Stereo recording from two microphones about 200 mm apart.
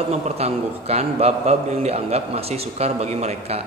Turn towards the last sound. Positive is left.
turn(degrees=-30)  # may be behind; listen again after turning